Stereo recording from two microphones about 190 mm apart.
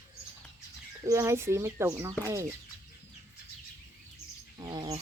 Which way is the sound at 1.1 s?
15° right (ahead or behind).